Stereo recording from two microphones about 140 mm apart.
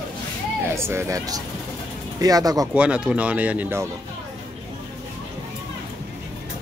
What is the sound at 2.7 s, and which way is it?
Speech, 10° right (ahead or behind).